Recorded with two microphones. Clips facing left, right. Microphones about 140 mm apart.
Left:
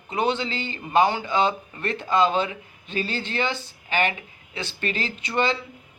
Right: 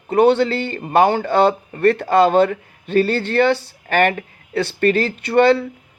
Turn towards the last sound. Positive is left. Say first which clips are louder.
# right 11 dB
turn(degrees=-65)  # may be behind; listen again after turning